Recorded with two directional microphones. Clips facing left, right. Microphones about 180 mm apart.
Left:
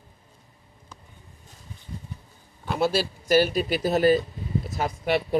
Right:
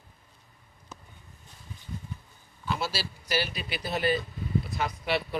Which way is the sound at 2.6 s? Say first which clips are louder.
Left 8 dB; 55° left (ahead or behind).